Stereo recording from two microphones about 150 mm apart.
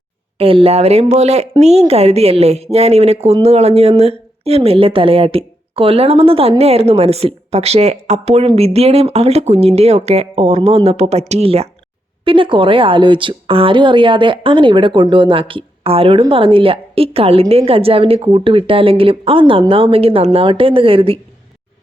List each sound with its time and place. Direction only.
0.3 s a woman's voice: 40° right (ahead or behind)